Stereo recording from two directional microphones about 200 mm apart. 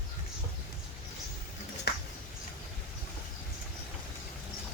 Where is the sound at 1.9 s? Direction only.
55° left (ahead or behind).